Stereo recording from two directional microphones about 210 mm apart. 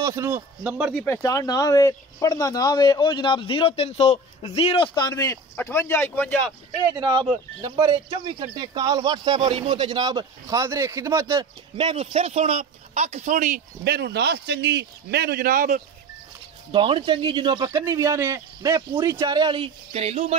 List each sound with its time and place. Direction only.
0.0 s a man's voice: 15° right (ahead or behind)
0.9 s speech: 10° left (ahead or behind)
7.0 s speech: 20° right (ahead or behind)
11.7 s speech: 25° right (ahead or behind); by 15.8 s 45° right (ahead or behind)
16.7 s speech: 25° right (ahead or behind)